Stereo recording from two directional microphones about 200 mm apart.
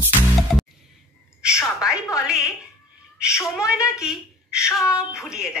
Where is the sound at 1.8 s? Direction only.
15° left (ahead or behind).